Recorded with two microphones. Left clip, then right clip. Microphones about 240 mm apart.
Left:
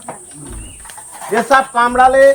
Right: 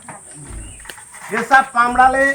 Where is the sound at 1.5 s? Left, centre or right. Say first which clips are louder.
Even; centre.